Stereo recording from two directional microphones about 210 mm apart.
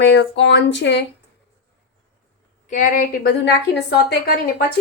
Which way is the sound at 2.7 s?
40° left (ahead or behind).